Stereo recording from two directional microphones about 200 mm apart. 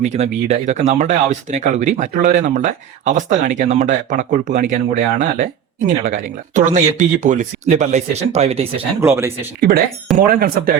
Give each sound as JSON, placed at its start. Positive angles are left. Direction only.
{"t": 0.0, "sound": "speech", "side_deg": -35}
{"t": 8.8, "sound": "speech", "side_deg": -10}
{"t": 9.6, "sound": "speech", "side_deg": -50}